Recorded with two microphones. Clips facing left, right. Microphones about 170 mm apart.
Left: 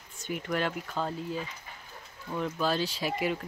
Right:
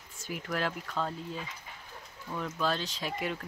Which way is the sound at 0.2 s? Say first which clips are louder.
Left 3 dB; centre (ahead or behind).